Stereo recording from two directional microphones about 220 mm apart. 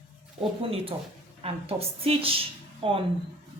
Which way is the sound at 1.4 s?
25° right (ahead or behind).